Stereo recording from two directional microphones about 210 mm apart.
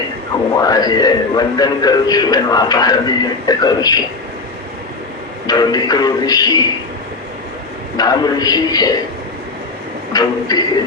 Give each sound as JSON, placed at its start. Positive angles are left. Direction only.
{"t": 0.5, "sound": "speech", "side_deg": 20}
{"t": 5.5, "sound": "speech", "side_deg": 20}
{"t": 7.9, "sound": "speech", "side_deg": 20}
{"t": 10.1, "sound": "speech", "side_deg": 20}